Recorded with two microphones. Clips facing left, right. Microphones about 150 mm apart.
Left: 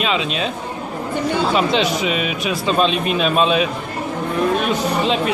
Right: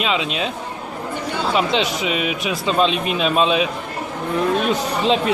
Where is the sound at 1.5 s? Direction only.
20° right (ahead or behind).